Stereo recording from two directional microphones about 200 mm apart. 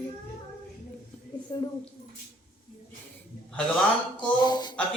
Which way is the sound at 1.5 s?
25° left (ahead or behind).